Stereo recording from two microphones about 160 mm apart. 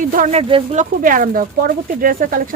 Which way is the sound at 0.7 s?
55° right (ahead or behind).